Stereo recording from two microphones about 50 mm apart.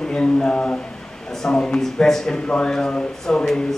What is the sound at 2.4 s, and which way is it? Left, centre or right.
Speech, left.